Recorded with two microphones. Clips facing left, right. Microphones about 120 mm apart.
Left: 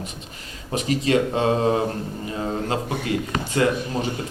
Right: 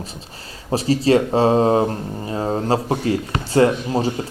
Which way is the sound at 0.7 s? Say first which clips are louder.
Right 5 dB; 35° right (ahead or behind).